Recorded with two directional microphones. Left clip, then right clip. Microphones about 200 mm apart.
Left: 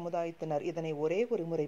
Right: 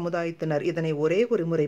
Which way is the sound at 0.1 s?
10° left (ahead or behind).